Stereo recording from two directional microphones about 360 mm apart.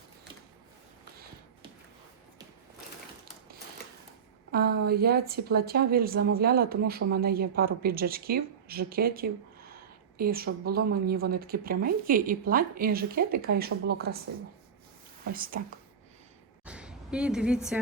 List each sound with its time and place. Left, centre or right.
4.5 s speech: right
15.2 s speech: right
16.6 s a sound: centre